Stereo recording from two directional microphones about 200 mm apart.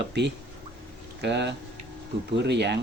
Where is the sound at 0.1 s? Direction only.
60° right (ahead or behind).